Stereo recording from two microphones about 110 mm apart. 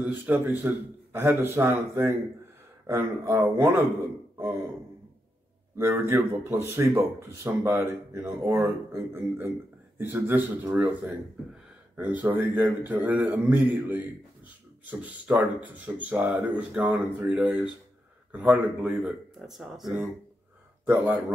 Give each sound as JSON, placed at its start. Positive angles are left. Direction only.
{"t": 0.0, "sound": "speech", "side_deg": -15}
{"t": 5.8, "sound": "speech", "side_deg": -25}
{"t": 12.2, "sound": "speech", "side_deg": -15}